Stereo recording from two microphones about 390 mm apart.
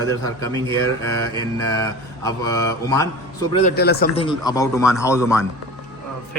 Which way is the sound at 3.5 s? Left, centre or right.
Centre.